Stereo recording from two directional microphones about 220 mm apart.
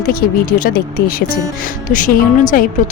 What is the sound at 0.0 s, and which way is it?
A woman's voice, 40° left (ahead or behind).